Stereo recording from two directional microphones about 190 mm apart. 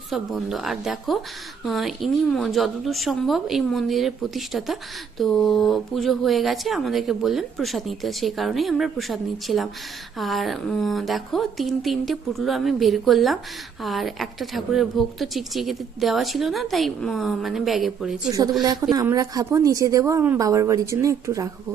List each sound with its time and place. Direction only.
0.1 s a woman's voice: centre (ahead or behind)
18.9 s speech: 20° right (ahead or behind)